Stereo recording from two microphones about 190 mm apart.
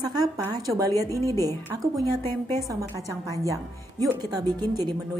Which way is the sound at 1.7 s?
15° right (ahead or behind).